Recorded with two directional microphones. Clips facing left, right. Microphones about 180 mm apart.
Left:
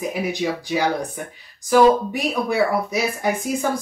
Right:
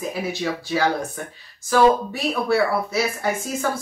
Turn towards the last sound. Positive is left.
turn(degrees=15)  # may be behind; listen again after turning